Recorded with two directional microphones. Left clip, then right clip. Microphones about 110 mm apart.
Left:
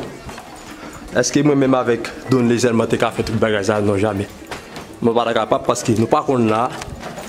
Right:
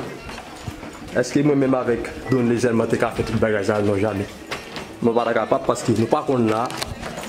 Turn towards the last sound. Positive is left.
turn(degrees=30)  # may be behind; listen again after turning